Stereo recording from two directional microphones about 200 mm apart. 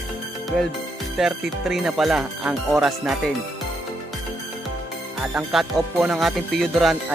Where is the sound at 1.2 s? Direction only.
Centre (ahead or behind).